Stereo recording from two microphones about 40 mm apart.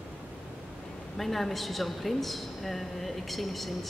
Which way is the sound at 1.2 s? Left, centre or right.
Centre.